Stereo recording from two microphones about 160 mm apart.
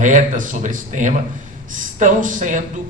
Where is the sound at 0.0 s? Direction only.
55° right (ahead or behind).